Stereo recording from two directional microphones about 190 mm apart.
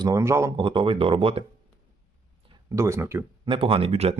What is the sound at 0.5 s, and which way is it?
Speech, 25° right (ahead or behind).